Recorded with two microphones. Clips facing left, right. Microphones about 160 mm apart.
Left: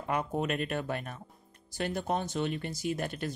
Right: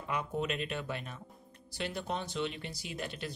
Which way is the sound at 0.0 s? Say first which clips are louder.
Left 4 dB; 50° left (ahead or behind).